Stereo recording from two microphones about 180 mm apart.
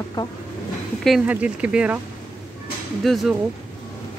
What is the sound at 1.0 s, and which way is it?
Speech, 5° right (ahead or behind).